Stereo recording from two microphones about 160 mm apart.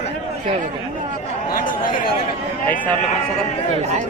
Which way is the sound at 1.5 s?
60° left (ahead or behind).